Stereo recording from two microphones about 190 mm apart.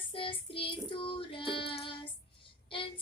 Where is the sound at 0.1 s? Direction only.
30° left (ahead or behind).